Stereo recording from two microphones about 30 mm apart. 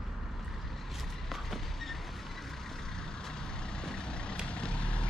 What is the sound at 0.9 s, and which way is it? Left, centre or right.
Vehicle, centre.